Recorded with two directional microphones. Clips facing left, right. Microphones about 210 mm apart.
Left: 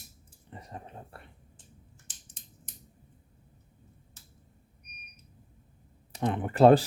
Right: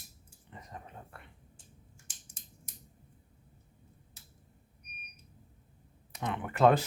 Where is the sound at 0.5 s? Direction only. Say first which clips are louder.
Left 4 dB; 35° left (ahead or behind).